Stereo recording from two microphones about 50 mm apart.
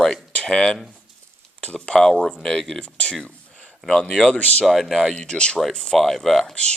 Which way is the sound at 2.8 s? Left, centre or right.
Left.